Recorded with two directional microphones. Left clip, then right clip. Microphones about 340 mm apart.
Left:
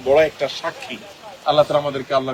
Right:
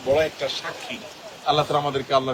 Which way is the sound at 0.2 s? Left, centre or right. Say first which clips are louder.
Left 6 dB; centre.